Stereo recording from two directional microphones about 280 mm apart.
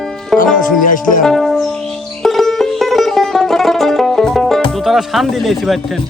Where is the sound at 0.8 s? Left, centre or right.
Left.